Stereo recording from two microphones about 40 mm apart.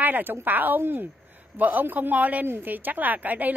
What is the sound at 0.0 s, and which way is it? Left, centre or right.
A woman's voice, right.